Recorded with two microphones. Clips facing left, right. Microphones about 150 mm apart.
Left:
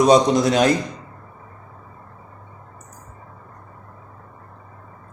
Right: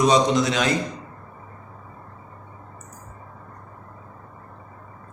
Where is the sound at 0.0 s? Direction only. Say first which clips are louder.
Left 4 dB; 40° left (ahead or behind).